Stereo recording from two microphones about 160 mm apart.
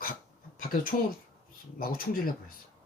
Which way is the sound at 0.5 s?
60° left (ahead or behind).